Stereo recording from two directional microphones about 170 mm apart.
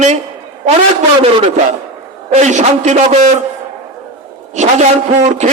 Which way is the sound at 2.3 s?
45° right (ahead or behind).